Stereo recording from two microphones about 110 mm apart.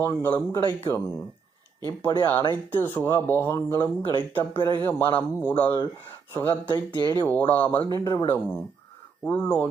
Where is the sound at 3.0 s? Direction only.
25° left (ahead or behind).